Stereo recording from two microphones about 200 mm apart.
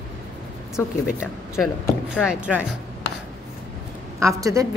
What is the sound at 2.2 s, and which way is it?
Speech, 5° right (ahead or behind).